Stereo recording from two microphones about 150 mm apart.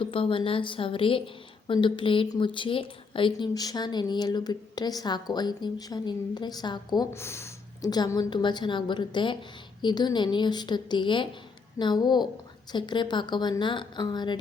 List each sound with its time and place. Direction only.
0.0 s a woman's voice: 35° left (ahead or behind)
7.1 s a woman's voice: 15° left (ahead or behind)